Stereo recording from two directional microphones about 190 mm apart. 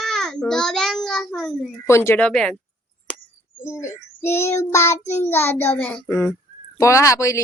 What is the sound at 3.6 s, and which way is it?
Child singing, 15° left (ahead or behind).